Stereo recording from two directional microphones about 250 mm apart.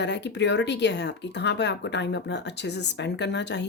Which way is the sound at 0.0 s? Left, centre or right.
Left.